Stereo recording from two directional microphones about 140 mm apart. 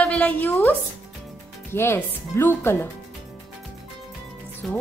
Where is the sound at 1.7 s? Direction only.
15° left (ahead or behind).